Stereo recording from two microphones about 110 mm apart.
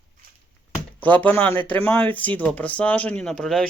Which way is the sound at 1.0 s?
15° left (ahead or behind).